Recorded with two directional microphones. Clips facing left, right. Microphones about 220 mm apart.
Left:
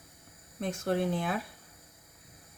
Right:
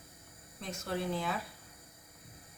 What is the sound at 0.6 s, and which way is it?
Speech, 55° left (ahead or behind).